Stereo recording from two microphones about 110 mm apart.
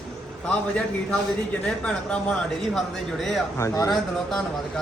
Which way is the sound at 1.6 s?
5° left (ahead or behind).